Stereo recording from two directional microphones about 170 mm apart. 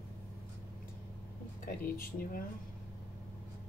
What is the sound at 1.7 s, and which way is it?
Speech, 55° left (ahead or behind).